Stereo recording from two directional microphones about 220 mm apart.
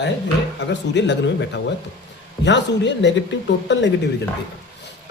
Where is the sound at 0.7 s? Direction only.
50° left (ahead or behind).